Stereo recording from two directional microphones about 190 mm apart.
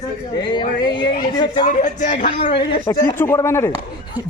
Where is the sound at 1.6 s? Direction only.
45° left (ahead or behind).